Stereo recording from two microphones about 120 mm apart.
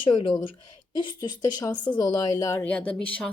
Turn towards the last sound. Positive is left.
turn(degrees=10)  # may be behind; listen again after turning